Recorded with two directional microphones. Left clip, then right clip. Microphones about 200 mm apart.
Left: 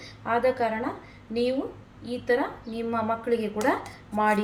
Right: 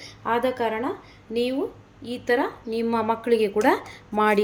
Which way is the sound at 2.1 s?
40° right (ahead or behind).